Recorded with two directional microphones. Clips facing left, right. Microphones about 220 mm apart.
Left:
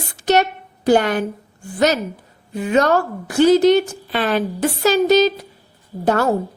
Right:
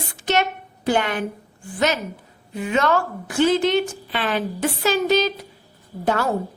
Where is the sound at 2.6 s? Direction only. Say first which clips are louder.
Left 4 dB; 40° left (ahead or behind).